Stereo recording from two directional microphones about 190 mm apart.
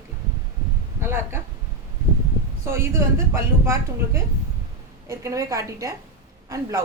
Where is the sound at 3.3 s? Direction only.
15° right (ahead or behind).